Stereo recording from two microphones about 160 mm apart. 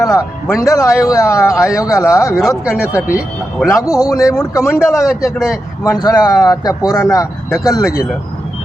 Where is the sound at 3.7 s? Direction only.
20° left (ahead or behind).